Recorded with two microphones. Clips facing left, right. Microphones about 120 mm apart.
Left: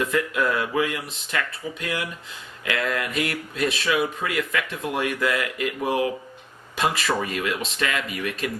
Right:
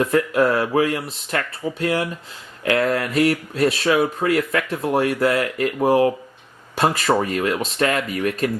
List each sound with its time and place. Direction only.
0.0 s speech: 40° right (ahead or behind)